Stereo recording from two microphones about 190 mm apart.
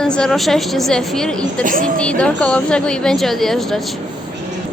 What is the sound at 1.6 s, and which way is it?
Speech, 45° right (ahead or behind).